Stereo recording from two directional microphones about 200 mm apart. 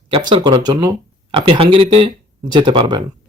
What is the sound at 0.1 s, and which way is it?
Speech, 25° right (ahead or behind).